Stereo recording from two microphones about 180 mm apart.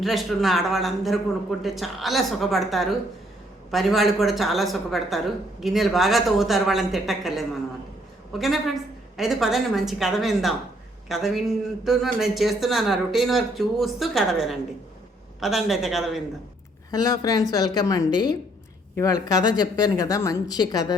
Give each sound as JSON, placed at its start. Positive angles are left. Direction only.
{"t": 0.0, "sound": "speech", "side_deg": 0}
{"t": 11.9, "sound": "speech", "side_deg": 0}
{"t": 16.9, "sound": "a woman's voice", "side_deg": 20}